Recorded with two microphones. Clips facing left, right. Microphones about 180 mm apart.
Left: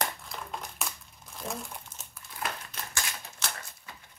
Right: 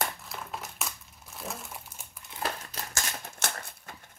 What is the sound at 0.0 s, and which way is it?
Crumpling, 5° right (ahead or behind).